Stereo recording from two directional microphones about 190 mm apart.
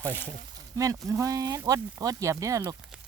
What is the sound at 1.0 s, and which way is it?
Speech, 15° right (ahead or behind).